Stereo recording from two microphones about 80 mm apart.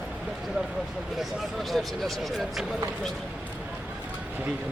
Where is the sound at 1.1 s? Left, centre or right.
Centre.